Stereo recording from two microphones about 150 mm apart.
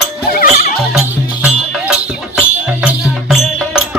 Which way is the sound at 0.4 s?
55° left (ahead or behind).